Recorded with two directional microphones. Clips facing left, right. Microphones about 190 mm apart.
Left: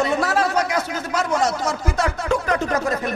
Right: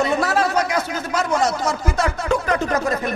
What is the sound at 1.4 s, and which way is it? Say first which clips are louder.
A man's voice: right 1 dB; 30° right (ahead or behind).